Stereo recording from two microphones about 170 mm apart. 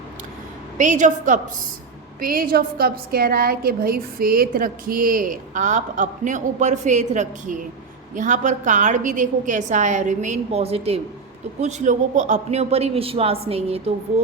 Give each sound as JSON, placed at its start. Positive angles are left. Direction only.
{"t": 0.8, "sound": "a woman's voice", "side_deg": -45}
{"t": 2.2, "sound": "a woman's voice", "side_deg": -55}